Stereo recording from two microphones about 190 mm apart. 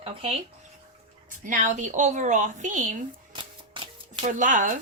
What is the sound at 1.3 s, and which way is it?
A woman's voice, 45° right (ahead or behind).